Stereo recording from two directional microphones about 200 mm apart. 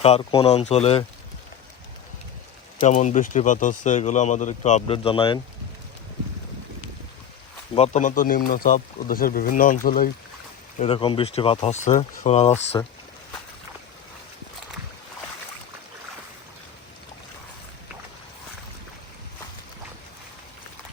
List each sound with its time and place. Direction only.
0.0 s speech: 25° left (ahead or behind)
2.8 s speech: 35° left (ahead or behind)
7.8 s speech: 40° left (ahead or behind)
10.8 s speech: 25° left (ahead or behind)